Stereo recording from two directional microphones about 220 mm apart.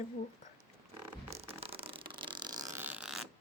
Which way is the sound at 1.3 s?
25° right (ahead or behind).